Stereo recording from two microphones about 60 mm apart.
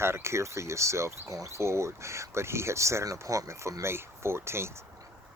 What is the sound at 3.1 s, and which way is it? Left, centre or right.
Speech, right.